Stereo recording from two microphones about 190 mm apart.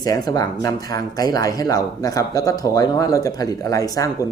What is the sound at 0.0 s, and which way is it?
Speech, 20° left (ahead or behind).